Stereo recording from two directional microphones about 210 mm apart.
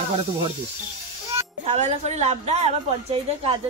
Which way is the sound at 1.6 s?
30° right (ahead or behind).